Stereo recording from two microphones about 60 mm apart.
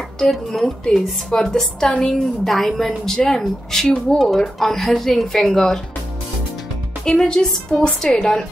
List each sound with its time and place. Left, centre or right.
0.2 s speech: centre
7.1 s speech: centre